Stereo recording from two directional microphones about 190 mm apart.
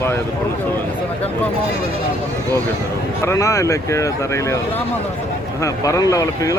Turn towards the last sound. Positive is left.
turn(degrees=15)  # may be behind; listen again after turning